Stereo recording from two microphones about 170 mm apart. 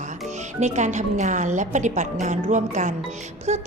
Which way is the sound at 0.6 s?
45° right (ahead or behind).